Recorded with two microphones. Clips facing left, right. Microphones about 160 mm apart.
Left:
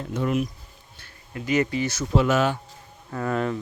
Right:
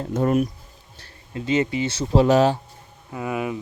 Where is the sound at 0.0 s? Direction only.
45° right (ahead or behind).